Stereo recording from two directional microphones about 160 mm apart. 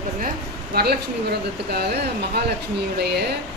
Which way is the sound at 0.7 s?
75° right (ahead or behind).